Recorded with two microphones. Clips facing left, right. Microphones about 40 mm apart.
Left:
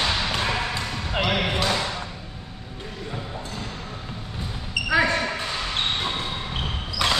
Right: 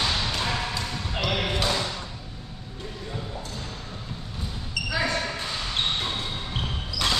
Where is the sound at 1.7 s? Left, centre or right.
Left.